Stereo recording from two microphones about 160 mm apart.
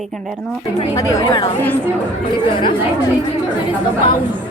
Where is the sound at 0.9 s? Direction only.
20° left (ahead or behind).